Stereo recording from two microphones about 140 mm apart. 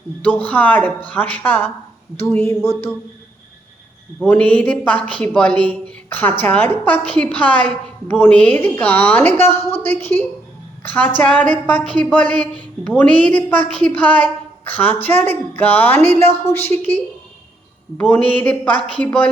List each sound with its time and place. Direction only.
0.2 s a man's voice: 10° left (ahead or behind)
4.3 s a man's voice: 10° left (ahead or behind)
18.1 s a man's voice: 10° left (ahead or behind)